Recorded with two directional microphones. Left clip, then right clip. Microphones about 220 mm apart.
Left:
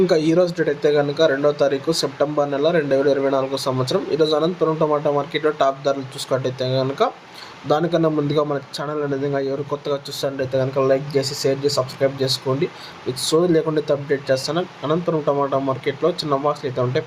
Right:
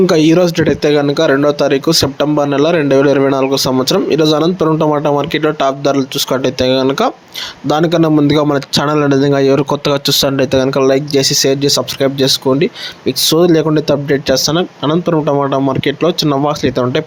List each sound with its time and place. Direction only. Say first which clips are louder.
0.0 s a man's voice: right 7 dB; 40° right (ahead or behind)